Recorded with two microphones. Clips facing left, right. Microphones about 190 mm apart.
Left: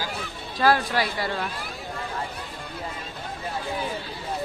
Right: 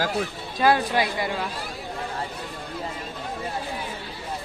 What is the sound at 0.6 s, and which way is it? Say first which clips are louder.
Speech: right 1 dB; 20° right (ahead or behind).